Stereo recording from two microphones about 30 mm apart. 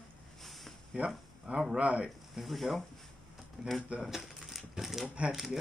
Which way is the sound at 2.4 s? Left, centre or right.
Centre.